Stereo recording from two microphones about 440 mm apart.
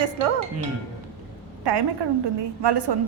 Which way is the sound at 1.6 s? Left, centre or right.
Right.